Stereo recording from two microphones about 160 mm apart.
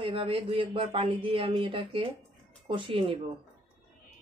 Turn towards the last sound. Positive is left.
turn(degrees=-30)  # may be behind; listen again after turning